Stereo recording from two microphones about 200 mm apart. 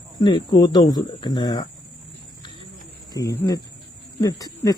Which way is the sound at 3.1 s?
15° left (ahead or behind).